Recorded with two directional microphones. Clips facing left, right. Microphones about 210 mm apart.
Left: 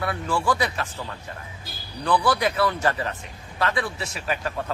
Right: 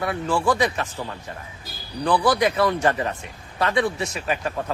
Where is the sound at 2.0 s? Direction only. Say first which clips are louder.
Right 3 dB; 10° right (ahead or behind).